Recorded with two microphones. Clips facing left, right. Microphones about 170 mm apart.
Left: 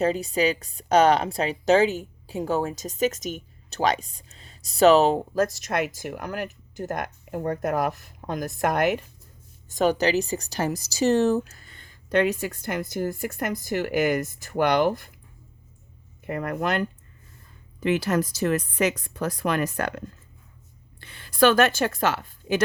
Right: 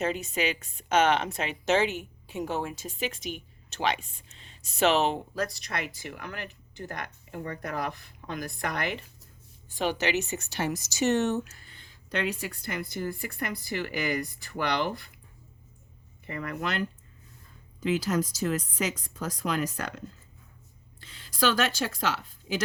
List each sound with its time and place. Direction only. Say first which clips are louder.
0.0 s a woman's voice: left 6 dB; 35° left (ahead or behind)
16.2 s speech: left 6 dB; 50° left (ahead or behind)
17.7 s a woman's voice: left 4 dB; 65° left (ahead or behind)